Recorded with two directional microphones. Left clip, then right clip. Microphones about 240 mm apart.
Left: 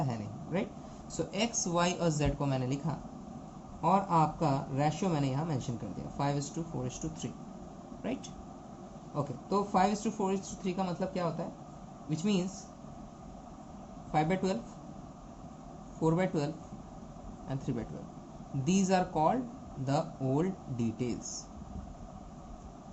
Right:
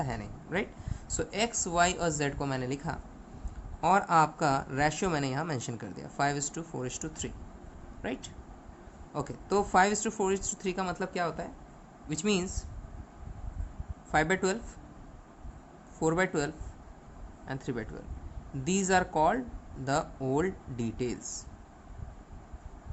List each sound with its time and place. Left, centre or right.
0.0 s a sound: right
1.1 s speech: right
14.1 s speech: right
16.0 s speech: right
17.5 s speech: right